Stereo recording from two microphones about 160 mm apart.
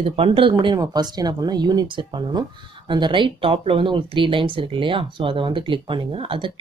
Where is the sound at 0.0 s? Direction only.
35° right (ahead or behind).